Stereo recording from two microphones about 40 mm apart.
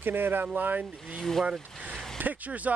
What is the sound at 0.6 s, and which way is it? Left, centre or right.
Speech, right.